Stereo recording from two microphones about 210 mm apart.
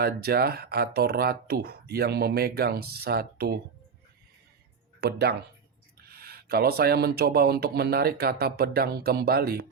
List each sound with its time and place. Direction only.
0.0 s speech: 50° right (ahead or behind)
4.9 s speech: 50° right (ahead or behind)